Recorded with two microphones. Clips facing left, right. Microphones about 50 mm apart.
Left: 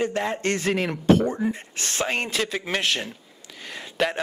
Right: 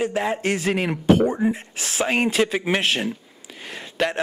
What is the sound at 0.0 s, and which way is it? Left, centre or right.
Speech, centre.